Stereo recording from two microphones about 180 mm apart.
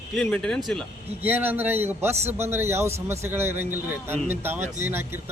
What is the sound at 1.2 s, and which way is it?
A man's voice, 10° right (ahead or behind).